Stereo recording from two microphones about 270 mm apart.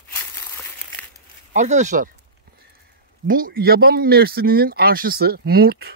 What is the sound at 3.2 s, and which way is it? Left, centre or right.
Speech, right.